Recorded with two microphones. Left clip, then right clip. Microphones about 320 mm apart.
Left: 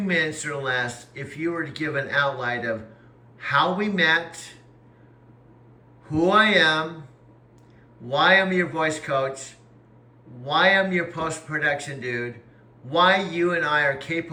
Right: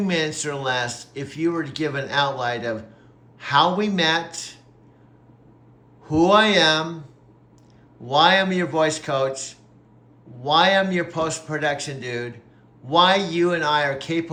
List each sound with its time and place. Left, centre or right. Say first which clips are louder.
0.1 s speech: left 3 dB; centre
6.1 s speech: right 2 dB; centre
8.0 s speech: right 2 dB; centre